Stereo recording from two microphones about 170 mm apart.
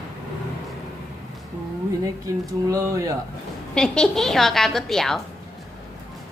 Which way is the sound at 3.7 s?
5° left (ahead or behind).